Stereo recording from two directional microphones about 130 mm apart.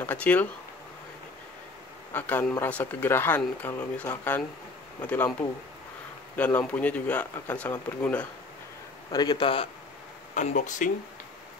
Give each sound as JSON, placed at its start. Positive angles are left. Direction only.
{"t": 0.0, "sound": "a sound", "side_deg": 10}
{"t": 2.1, "sound": "speech", "side_deg": 15}
{"t": 6.3, "sound": "speech", "side_deg": 10}
{"t": 9.1, "sound": "a man's voice", "side_deg": 30}
{"t": 10.3, "sound": "speech", "side_deg": 75}